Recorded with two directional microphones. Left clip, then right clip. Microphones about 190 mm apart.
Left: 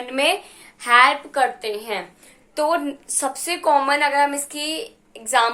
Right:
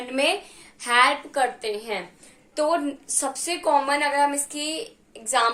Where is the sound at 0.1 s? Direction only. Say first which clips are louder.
Left 3 dB; 5° right (ahead or behind).